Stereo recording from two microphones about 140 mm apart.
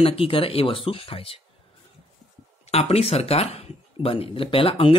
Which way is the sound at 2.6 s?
50° left (ahead or behind).